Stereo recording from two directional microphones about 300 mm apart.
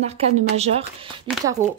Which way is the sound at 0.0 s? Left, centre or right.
Right.